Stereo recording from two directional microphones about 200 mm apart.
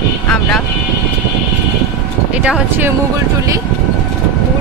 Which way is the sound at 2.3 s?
5° right (ahead or behind).